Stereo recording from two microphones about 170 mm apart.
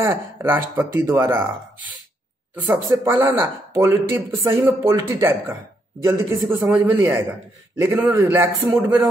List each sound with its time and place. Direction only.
0.0 s speech: 15° right (ahead or behind)
2.5 s speech: 10° right (ahead or behind)